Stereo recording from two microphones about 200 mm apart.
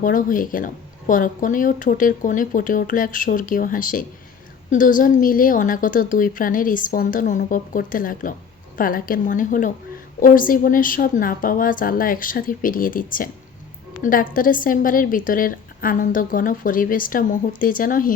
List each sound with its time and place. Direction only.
0.0 s a woman's voice: 40° left (ahead or behind)